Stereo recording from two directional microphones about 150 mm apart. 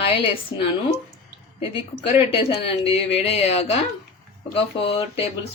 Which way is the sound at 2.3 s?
40° left (ahead or behind).